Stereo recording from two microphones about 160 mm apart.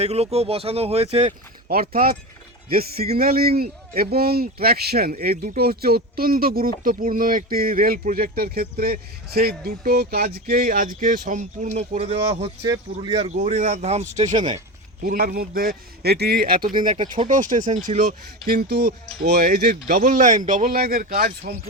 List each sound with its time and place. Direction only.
0.0 s speech: 40° right (ahead or behind)
1.6 s speech: 70° right (ahead or behind)
3.2 s speech: 70° right (ahead or behind); by 12.5 s 40° right (ahead or behind)
12.6 s speech: 25° right (ahead or behind)
13.2 s speech: 45° right (ahead or behind)
15.0 s speech: 65° right (ahead or behind)
16.8 s speech: 50° right (ahead or behind); by 19.4 s 90° right
19.5 s speech: 70° right (ahead or behind)